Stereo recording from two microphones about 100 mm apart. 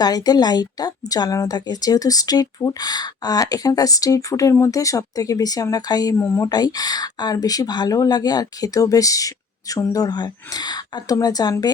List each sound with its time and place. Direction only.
0.0 s speech: 40° left (ahead or behind)
6.1 s speech: 25° left (ahead or behind)
6.5 s speech: 40° left (ahead or behind)